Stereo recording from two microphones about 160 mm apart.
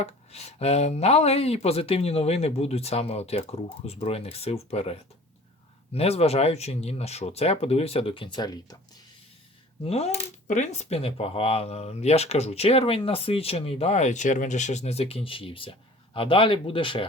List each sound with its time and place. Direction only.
0.0 s coin: 40° left (ahead or behind); by 8.8 s 25° left (ahead or behind)
9.8 s coin: 40° left (ahead or behind)